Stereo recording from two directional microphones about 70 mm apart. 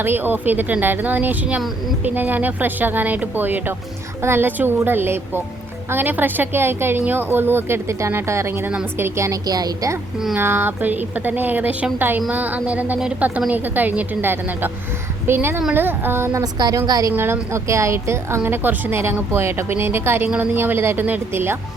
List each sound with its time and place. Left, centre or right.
0.0 s a woman's voice: right
9.5 s a woman's voice: right
10.3 s a woman's voice: right
16.4 s a woman's voice: right
17.1 s speech: right